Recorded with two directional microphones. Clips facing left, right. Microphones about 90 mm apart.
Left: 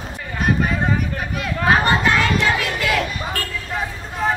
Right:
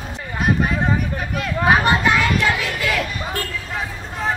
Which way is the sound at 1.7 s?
10° right (ahead or behind).